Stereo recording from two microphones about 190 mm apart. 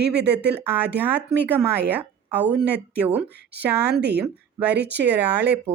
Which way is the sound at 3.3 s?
60° right (ahead or behind).